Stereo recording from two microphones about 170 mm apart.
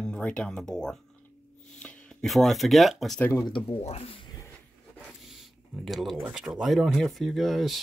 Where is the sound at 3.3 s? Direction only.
25° left (ahead or behind).